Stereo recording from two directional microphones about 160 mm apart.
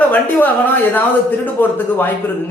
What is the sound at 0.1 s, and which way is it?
Speech, 10° left (ahead or behind).